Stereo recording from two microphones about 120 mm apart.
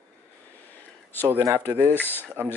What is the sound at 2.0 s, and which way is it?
Speech, 15° left (ahead or behind).